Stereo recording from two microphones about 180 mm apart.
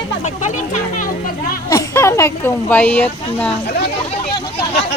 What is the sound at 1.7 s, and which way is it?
Speech, 15° left (ahead or behind).